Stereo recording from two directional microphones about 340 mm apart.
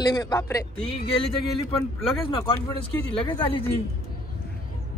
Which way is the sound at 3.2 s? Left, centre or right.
Centre.